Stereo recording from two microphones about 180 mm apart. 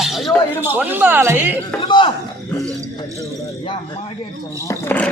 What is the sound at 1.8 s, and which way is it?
Speech, 25° left (ahead or behind).